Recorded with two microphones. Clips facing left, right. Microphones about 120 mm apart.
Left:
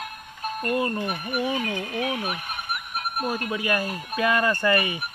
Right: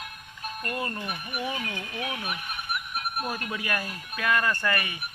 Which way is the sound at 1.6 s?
40° left (ahead or behind).